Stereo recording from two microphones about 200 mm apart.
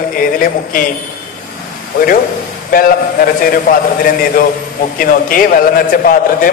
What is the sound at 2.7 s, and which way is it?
A man's voice, 45° left (ahead or behind).